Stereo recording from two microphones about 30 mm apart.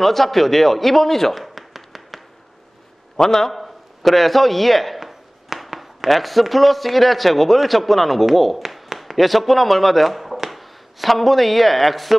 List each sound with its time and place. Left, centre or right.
0.0 s a man's voice: centre
3.2 s a man's voice: centre
3.5 s a man's voice: centre
5.0 s a sound: centre
6.0 s speech: centre